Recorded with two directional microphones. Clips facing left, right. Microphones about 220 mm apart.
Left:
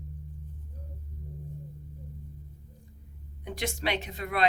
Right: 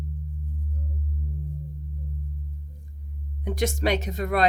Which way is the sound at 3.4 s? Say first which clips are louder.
Right 7 dB; 45° right (ahead or behind).